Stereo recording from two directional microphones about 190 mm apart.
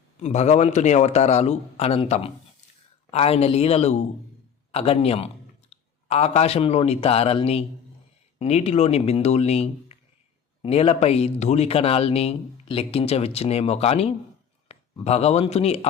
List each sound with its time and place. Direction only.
0.2 s speech: 35° left (ahead or behind)
14.7 s a sound: 30° left (ahead or behind)
15.0 s speech: 35° left (ahead or behind)